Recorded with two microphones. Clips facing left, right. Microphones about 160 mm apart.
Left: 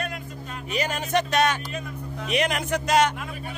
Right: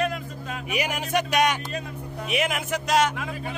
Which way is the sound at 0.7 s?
10° right (ahead or behind).